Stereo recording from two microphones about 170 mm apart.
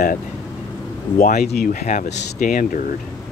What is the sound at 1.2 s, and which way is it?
Speech, 60° left (ahead or behind).